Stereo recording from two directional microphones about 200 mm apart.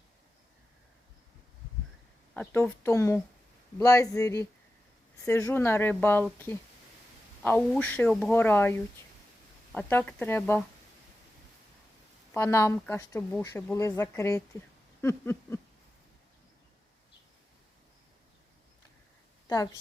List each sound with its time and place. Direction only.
2.3 s speech: 10° left (ahead or behind)
7.4 s speech: 10° left (ahead or behind)
12.3 s speech: 10° left (ahead or behind)
19.5 s speech: 20° left (ahead or behind)